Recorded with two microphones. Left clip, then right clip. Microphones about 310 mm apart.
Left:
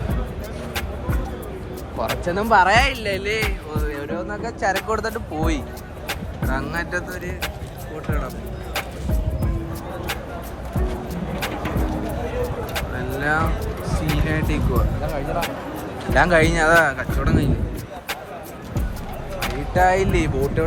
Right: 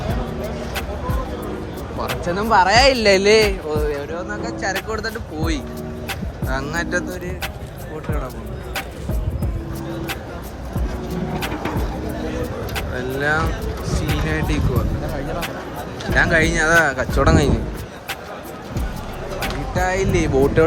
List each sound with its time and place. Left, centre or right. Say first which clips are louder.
2.0 s speech: even; centre
2.9 s speech: right 10 dB; centre
3.8 s speech: right 4 dB; centre
13.1 s speech: right 1 dB; centre
16.1 s speech: even; centre
17.2 s speech: right 7 dB; centre
19.4 s speech: left 4 dB; centre
20.6 s speech: right 8 dB; right